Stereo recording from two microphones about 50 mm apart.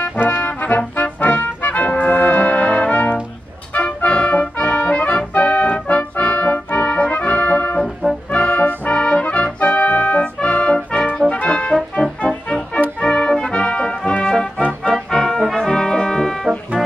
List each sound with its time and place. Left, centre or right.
0.0 s brass instrument: left
3.7 s music: left
14.6 s music: left
15.0 s music: centre
15.5 s brass instrument: centre